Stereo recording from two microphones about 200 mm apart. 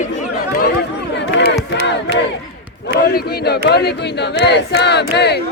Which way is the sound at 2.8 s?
55° left (ahead or behind).